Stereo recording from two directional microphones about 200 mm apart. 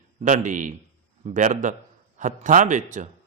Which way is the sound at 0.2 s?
40° right (ahead or behind).